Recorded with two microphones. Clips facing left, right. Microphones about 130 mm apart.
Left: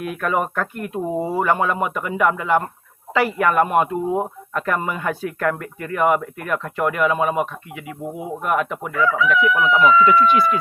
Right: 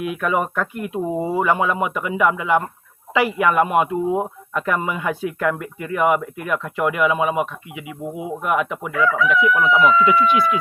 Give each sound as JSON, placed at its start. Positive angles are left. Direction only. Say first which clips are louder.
{"t": 0.2, "sound": "speech", "louder": "left 1 dB", "side_deg": -5}